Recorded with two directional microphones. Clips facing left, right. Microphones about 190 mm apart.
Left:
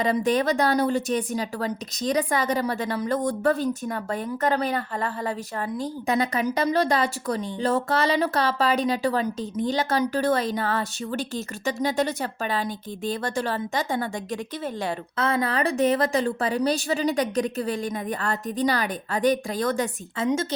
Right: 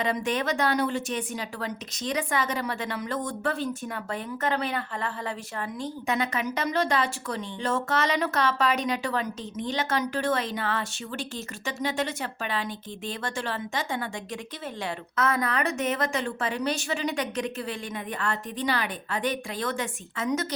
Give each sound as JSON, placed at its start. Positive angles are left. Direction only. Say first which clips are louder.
{"t": 0.0, "sound": "a woman's voice", "louder": "left 5 dB", "side_deg": 35}